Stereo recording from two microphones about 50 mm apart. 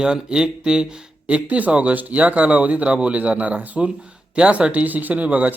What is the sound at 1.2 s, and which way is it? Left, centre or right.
A man's voice, right.